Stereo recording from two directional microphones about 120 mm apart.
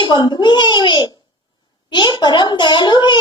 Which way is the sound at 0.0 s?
40° left (ahead or behind).